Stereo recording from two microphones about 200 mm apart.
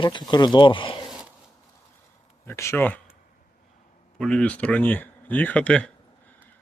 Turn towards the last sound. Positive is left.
turn(degrees=5)  # may be behind; listen again after turning